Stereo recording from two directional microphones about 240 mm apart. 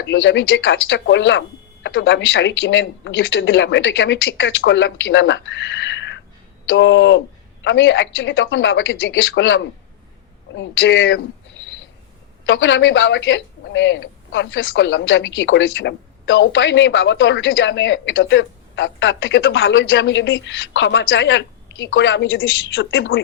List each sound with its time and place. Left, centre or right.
0.0 s a woman's voice: left